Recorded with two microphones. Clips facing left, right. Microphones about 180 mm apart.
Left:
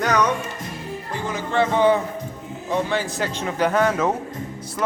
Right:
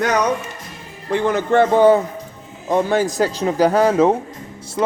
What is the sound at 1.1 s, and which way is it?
A man's voice, 65° right (ahead or behind).